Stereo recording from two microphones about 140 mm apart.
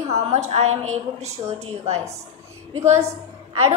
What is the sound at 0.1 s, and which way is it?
A woman's voice, 50° right (ahead or behind).